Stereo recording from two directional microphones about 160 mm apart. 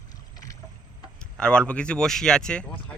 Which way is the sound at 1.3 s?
5° left (ahead or behind).